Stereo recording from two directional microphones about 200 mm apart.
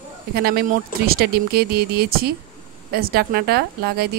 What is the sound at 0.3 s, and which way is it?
Speech, 50° right (ahead or behind).